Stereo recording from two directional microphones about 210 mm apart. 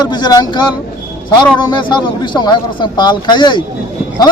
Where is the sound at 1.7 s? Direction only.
20° left (ahead or behind).